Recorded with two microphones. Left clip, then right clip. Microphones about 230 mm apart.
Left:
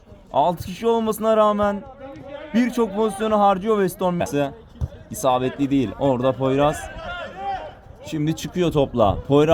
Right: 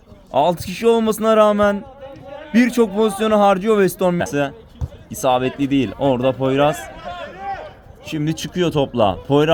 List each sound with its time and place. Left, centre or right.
0.3 s a man's voice: right
4.3 s speech: centre
8.0 s speech: centre